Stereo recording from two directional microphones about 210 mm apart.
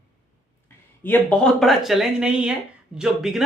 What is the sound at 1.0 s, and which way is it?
Speech, 10° left (ahead or behind).